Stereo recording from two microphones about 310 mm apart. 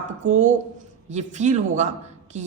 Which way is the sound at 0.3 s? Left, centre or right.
Right.